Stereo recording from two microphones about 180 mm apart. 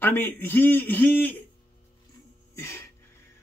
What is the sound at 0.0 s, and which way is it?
A man's voice, 10° left (ahead or behind).